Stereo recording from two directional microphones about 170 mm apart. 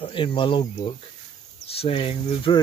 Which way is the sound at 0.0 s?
30° left (ahead or behind).